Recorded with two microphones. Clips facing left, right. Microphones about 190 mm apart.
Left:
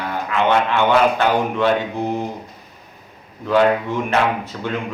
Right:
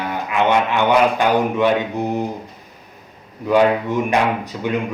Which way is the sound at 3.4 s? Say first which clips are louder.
Right 1 dB; 15° right (ahead or behind).